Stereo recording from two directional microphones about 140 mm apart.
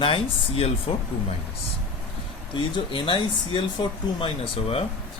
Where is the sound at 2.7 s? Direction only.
35° left (ahead or behind).